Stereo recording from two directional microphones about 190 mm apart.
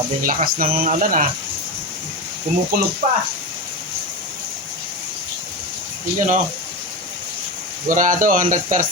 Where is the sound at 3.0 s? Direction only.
40° right (ahead or behind).